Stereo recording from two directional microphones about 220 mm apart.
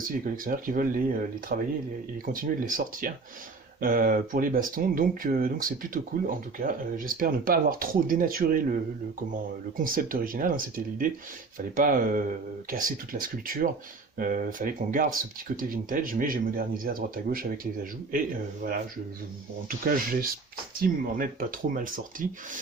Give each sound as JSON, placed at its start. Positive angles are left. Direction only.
{"t": 0.0, "sound": "speech", "side_deg": -40}
{"t": 19.6, "sound": "speech", "side_deg": -40}